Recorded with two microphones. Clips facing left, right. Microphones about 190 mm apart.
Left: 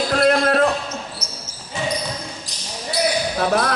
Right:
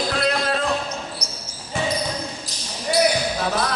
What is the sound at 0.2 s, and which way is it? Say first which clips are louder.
Basketball bounce: left 9 dB; 55° left (ahead or behind).